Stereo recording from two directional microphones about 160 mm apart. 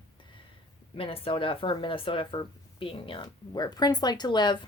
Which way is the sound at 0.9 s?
35° left (ahead or behind).